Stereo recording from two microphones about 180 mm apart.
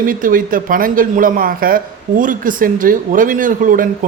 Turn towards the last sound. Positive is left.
turn(degrees=-50)  # may be behind; listen again after turning